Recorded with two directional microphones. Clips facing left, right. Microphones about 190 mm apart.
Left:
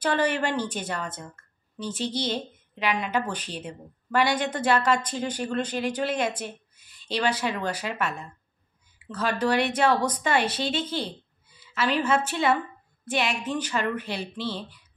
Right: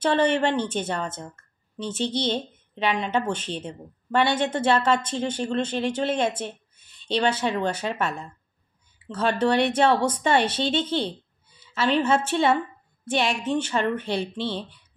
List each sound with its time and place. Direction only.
0.0 s a woman's voice: 25° right (ahead or behind)